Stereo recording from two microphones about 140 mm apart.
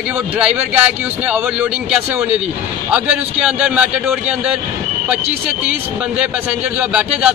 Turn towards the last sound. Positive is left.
turn(degrees=-10)  # may be behind; listen again after turning